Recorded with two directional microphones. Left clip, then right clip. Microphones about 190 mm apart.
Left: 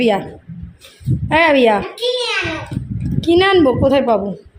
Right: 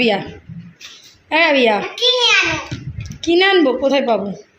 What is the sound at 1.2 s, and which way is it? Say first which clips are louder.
Speech: left 2 dB; 20° left (ahead or behind).